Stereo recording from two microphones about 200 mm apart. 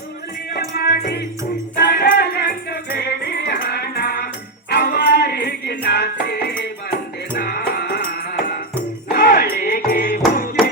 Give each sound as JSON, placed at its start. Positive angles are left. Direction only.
{"t": 0.5, "sound": "music", "side_deg": 50}